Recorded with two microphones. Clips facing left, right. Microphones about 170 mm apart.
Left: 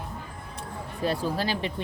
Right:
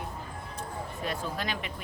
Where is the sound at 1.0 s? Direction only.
35° left (ahead or behind).